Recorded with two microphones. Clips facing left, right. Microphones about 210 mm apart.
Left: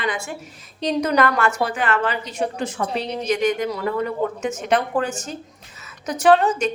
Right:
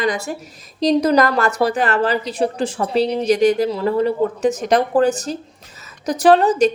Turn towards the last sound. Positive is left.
turn(degrees=-35)  # may be behind; listen again after turning